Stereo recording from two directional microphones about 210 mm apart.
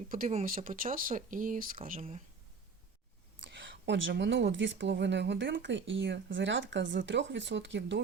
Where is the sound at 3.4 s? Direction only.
60° right (ahead or behind).